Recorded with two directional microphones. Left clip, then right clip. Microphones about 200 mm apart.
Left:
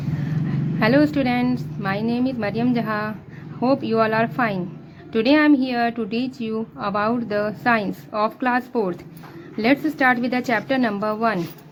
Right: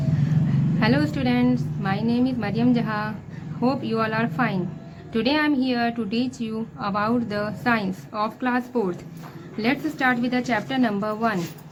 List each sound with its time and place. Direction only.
0.8 s a woman's voice: 35° left (ahead or behind)